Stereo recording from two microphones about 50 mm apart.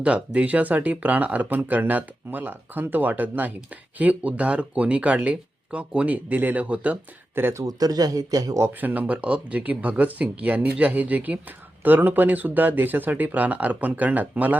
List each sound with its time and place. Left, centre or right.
0.0 s speech: right
7.4 s speech: right
8.8 s speech: right